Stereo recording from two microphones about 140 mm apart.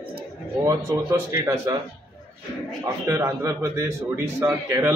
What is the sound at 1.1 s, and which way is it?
Speech, 15° right (ahead or behind).